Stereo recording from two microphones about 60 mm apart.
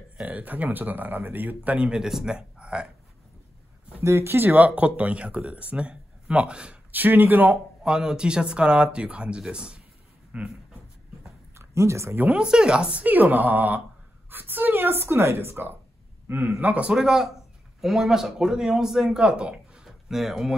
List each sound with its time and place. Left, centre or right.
0.3 s speech: right
1.9 s speech: centre
4.0 s speech: right
4.5 s speech: right
6.9 s speech: right
7.8 s speech: centre
11.5 s a sound: right
12.2 s a man's voice: right
16.6 s speech: right
16.9 s a man's voice: centre